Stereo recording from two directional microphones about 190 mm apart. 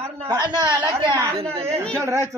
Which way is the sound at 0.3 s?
25° right (ahead or behind).